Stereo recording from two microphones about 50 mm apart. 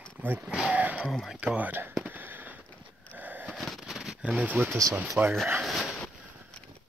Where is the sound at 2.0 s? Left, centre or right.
Right.